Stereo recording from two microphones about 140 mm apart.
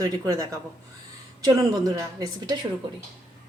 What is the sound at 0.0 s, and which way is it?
A woman's voice, 25° right (ahead or behind).